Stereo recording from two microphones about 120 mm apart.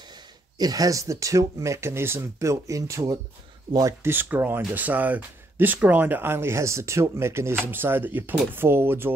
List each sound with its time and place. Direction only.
0.6 s speech: 30° right (ahead or behind)